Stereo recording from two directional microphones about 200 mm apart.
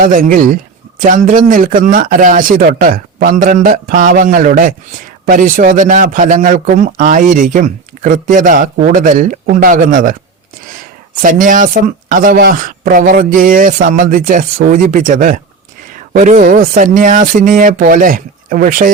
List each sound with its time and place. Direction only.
0.0 s a man's voice: 45° right (ahead or behind)
11.2 s a man's voice: 40° right (ahead or behind)